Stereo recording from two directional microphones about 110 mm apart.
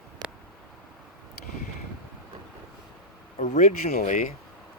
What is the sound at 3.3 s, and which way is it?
Speech, 90° left.